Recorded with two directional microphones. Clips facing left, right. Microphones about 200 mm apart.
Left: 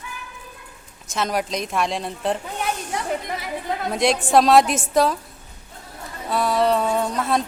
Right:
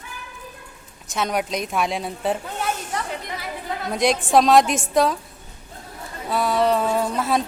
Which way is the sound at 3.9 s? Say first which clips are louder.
Even; centre (ahead or behind).